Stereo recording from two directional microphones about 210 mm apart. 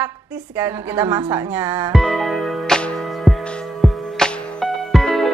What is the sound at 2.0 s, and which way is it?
Music, centre (ahead or behind).